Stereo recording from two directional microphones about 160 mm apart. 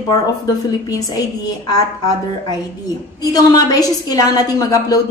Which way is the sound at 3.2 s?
25° left (ahead or behind).